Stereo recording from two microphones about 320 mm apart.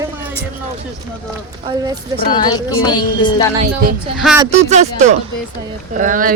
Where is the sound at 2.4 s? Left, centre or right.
Centre.